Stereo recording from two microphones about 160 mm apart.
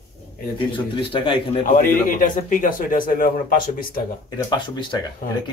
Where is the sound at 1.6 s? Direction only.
55° left (ahead or behind).